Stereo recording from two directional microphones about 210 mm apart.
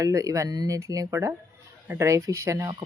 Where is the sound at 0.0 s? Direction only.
15° right (ahead or behind).